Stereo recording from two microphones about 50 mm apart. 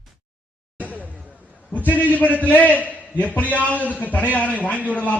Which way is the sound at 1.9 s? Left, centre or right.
Right.